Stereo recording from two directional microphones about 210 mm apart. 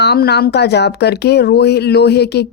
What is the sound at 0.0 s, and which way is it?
Speech, 50° left (ahead or behind).